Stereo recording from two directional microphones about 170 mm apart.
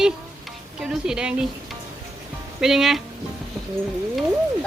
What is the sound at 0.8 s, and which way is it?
Speech, 5° right (ahead or behind).